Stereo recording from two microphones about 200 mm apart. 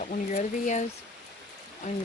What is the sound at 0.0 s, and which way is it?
Speech, 40° left (ahead or behind).